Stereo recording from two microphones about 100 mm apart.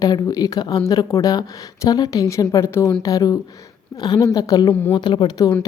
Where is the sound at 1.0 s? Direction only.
35° left (ahead or behind).